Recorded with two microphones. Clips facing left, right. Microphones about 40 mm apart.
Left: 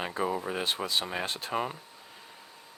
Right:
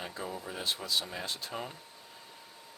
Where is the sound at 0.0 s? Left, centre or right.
Left.